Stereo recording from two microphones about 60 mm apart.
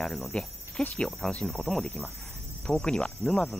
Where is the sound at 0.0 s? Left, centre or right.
Centre.